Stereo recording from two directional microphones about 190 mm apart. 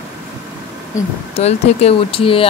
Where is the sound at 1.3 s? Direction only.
35° left (ahead or behind).